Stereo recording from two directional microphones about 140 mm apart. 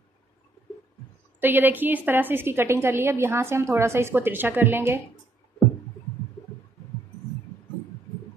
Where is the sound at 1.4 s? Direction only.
15° right (ahead or behind).